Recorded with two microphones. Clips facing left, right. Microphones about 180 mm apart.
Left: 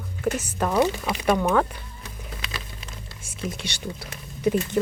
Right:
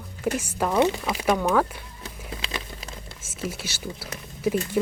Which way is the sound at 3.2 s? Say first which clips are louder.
Left 1 dB; 5° right (ahead or behind).